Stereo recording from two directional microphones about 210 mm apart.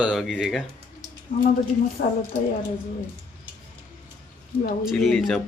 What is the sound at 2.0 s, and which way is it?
Speech, 55° left (ahead or behind).